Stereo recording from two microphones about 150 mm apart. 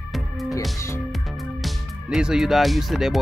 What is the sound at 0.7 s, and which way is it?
Music, 20° left (ahead or behind).